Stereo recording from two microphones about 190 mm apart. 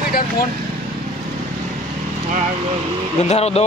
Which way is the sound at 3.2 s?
35° left (ahead or behind).